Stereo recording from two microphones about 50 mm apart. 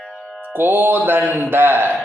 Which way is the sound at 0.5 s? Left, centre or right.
Right.